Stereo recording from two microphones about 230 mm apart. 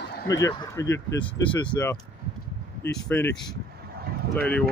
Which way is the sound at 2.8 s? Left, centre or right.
Centre.